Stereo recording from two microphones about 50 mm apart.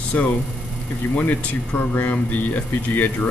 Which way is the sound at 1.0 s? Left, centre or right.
Left.